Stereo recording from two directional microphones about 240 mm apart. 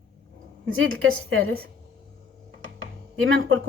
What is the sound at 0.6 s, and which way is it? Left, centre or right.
Speech, right.